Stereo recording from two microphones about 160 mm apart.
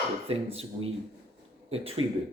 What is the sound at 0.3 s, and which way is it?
Speech, 35° right (ahead or behind).